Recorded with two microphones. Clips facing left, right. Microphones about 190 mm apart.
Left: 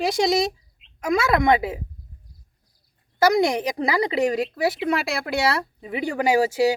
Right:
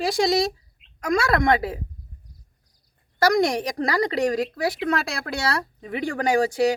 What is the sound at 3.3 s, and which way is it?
A woman's voice, 5° left (ahead or behind).